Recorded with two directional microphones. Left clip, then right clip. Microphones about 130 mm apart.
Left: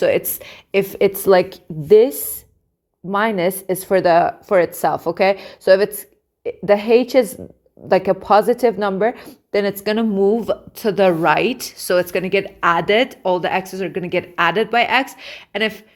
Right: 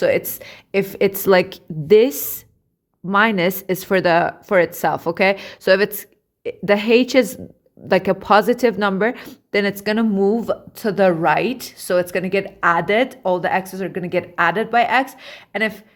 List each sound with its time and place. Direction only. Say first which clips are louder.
0.0 s a woman's voice: left 1 dB; 10° left (ahead or behind); by 15.8 s 30° left (ahead or behind)